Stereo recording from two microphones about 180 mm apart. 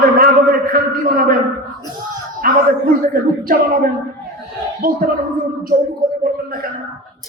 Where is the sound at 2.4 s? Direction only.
55° right (ahead or behind).